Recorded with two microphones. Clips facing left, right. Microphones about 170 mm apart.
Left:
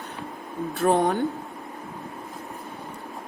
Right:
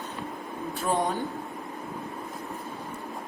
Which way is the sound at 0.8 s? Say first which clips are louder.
Left 6 dB; 60° left (ahead or behind).